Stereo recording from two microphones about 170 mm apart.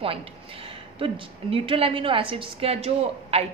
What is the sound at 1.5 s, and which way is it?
A woman's voice, 35° right (ahead or behind).